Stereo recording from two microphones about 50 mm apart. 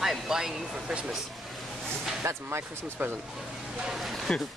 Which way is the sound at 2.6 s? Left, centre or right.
Right.